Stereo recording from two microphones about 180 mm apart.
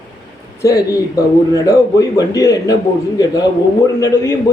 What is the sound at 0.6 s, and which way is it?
A man's voice, 20° left (ahead or behind).